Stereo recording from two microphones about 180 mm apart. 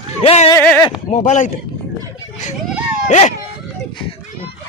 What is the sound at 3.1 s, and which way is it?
Speech, 40° left (ahead or behind).